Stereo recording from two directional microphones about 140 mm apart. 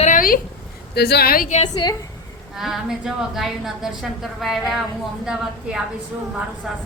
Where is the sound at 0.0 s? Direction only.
80° left.